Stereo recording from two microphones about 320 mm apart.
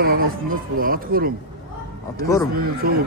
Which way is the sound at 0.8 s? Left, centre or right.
Right.